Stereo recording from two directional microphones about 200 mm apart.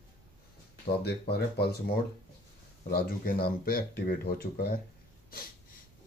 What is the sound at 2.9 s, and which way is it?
Speech, 50° left (ahead or behind).